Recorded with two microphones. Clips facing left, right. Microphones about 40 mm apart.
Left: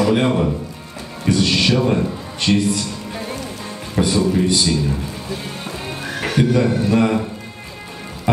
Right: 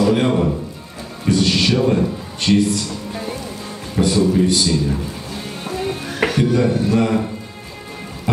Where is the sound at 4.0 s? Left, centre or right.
Left.